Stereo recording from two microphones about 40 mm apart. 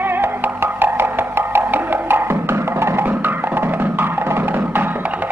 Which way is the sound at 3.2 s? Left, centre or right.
Right.